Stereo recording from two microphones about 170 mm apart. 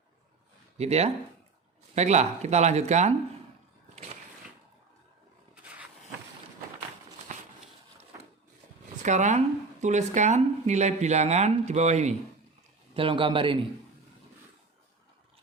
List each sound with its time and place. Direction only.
0.8 s speech: 40° right (ahead or behind)
7.3 s a sound: 50° right (ahead or behind)
9.0 s speech: 45° right (ahead or behind)
12.9 s speech: 30° right (ahead or behind)